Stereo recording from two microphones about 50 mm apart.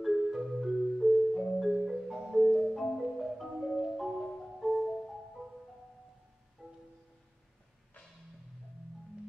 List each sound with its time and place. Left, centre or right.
0.0 s marimba: centre
2.5 s marimba: centre
4.8 s music: centre
6.6 s music: right